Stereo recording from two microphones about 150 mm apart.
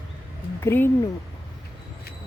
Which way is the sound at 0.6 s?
15° left (ahead or behind).